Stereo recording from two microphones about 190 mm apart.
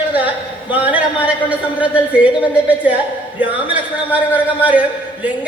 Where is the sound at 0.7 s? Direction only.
10° right (ahead or behind).